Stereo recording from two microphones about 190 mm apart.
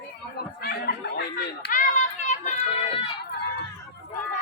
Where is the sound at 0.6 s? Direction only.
55° left (ahead or behind); by 3.1 s 25° left (ahead or behind).